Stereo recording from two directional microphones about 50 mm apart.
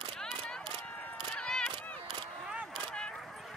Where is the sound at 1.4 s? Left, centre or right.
Centre.